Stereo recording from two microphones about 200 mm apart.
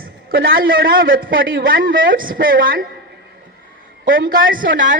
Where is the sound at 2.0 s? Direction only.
45° right (ahead or behind).